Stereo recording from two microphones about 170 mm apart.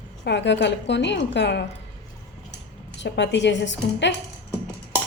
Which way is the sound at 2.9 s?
90° left.